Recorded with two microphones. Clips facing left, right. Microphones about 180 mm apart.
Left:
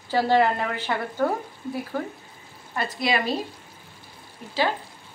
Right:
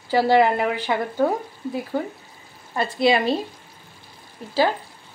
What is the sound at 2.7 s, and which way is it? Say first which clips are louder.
Speech: right 6 dB; 30° right (ahead or behind).